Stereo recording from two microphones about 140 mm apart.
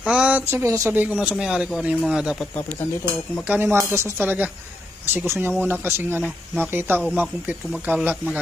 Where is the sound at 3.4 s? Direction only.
15° right (ahead or behind).